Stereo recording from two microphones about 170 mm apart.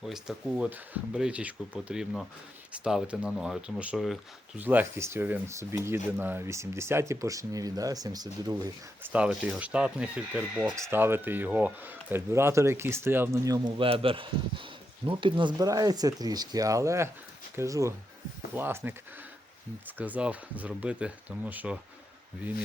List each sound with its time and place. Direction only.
0.0 s speech: 5° right (ahead or behind); by 8.7 s 20° right (ahead or behind)
9.1 s speech: 5° right (ahead or behind)
13.7 s speech: 30° right (ahead or behind); by 18.9 s 10° right (ahead or behind)
20.0 s speech: 10° right (ahead or behind)